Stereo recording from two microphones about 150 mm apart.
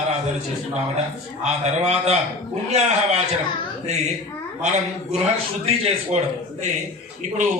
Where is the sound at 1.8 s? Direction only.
45° right (ahead or behind).